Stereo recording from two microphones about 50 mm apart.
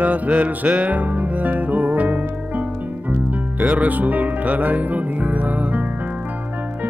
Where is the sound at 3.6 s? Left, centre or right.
Right.